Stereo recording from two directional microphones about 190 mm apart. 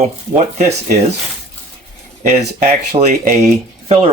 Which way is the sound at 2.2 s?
35° right (ahead or behind).